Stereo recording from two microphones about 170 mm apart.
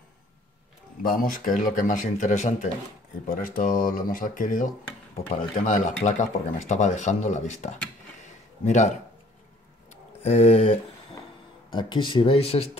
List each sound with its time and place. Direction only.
1.0 s speech: 55° left (ahead or behind)
3.3 s speech: 55° left (ahead or behind)
5.7 s speech: 50° left (ahead or behind)
9.8 s a sound: 40° left (ahead or behind)
11.7 s speech: 25° left (ahead or behind)